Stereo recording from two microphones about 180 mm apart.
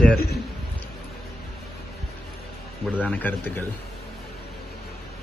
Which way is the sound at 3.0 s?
10° left (ahead or behind).